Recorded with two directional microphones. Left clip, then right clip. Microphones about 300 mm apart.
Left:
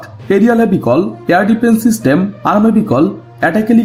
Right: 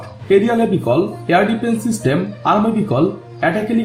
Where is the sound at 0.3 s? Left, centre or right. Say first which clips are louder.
Left 3 dB; left.